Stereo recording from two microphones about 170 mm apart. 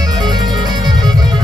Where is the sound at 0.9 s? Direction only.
25° right (ahead or behind).